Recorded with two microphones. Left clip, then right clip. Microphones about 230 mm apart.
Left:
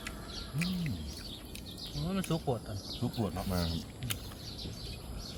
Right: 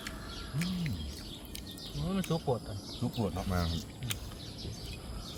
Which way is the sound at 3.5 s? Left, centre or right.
Centre.